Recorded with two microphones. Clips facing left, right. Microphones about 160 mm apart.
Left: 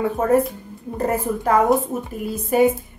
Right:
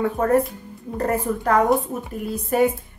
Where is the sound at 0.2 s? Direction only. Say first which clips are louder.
Left 2 dB; centre (ahead or behind).